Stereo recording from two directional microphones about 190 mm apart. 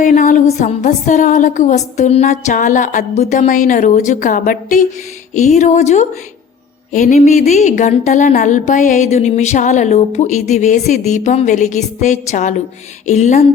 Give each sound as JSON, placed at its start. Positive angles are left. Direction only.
{"t": 0.0, "sound": "a woman's voice", "side_deg": 40}